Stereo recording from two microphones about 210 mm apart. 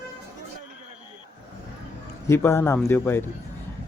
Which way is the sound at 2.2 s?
15° left (ahead or behind).